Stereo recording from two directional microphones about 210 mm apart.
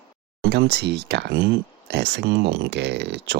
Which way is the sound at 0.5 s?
50° right (ahead or behind).